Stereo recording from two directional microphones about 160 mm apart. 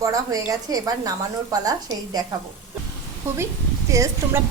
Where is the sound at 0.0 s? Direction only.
20° right (ahead or behind).